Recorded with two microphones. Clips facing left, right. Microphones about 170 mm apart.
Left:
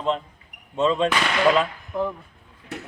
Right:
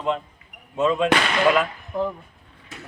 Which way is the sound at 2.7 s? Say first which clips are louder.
Left 7 dB; 70° left (ahead or behind).